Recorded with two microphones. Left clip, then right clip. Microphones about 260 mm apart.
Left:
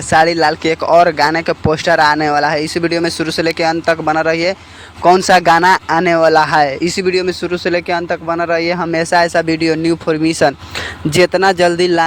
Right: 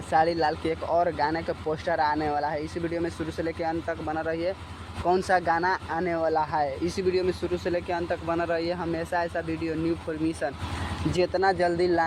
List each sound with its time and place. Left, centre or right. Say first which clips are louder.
0.1 s speech: left 12 dB; left